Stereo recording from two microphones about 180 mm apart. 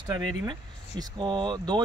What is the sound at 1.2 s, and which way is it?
Speech, 25° right (ahead or behind).